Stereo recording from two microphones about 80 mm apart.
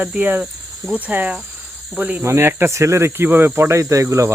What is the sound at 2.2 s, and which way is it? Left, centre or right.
Speech, right.